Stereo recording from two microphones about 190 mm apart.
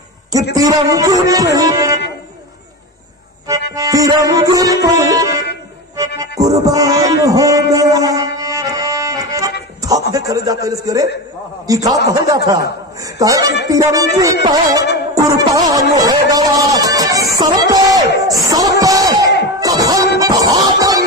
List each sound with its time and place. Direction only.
0.6 s music: 20° right (ahead or behind)
3.7 s music: 20° right (ahead or behind)
10.1 s a man's voice: 20° right (ahead or behind)
12.1 s music: 20° right (ahead or behind)